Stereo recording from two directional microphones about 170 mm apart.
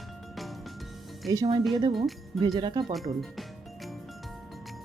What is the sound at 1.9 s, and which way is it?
Speech, centre (ahead or behind).